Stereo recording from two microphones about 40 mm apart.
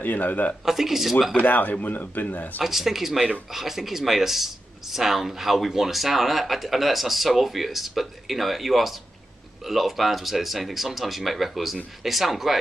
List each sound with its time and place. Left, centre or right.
0.0 s speech: left
0.7 s speech: centre
1.4 s speech: left
2.6 s speech: centre